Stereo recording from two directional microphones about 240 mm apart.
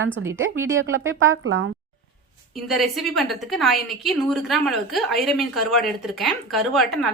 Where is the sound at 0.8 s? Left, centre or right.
Right.